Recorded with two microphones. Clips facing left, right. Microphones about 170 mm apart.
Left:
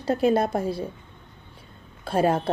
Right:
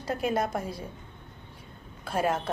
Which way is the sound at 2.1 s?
30° left (ahead or behind).